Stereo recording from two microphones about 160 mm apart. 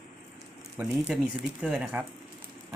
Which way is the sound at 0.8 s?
10° right (ahead or behind).